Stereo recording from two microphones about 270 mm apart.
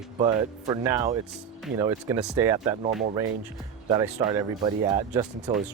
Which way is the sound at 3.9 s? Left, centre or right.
Centre.